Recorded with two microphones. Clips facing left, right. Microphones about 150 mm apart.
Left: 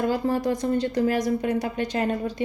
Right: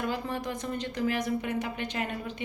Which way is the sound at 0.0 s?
35° left (ahead or behind).